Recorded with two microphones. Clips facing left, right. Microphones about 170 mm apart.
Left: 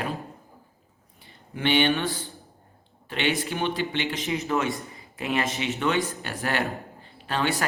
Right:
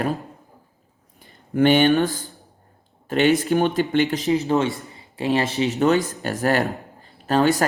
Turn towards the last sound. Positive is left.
turn(degrees=-40)  # may be behind; listen again after turning